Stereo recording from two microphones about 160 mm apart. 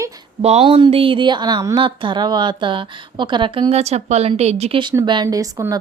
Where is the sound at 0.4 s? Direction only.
40° right (ahead or behind).